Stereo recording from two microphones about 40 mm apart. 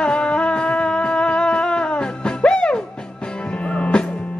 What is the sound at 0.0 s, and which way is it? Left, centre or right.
Music, left.